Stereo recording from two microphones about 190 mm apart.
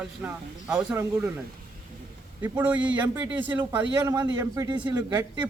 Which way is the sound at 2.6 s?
5° right (ahead or behind).